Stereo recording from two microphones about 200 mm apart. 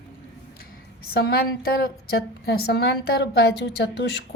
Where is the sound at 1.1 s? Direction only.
50° left (ahead or behind).